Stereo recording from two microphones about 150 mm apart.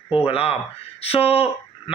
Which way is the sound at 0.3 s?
40° left (ahead or behind).